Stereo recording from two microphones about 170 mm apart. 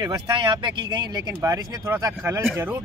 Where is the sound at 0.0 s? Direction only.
25° right (ahead or behind).